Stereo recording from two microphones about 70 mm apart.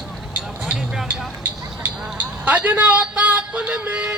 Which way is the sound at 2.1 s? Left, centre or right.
Right.